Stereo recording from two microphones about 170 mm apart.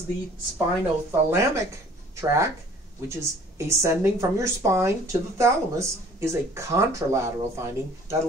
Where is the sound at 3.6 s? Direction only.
15° right (ahead or behind).